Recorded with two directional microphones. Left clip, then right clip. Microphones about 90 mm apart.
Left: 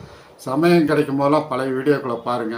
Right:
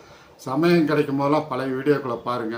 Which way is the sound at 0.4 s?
20° right (ahead or behind).